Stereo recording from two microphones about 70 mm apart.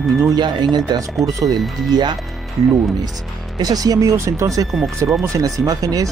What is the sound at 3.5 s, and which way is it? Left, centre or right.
Speech, right.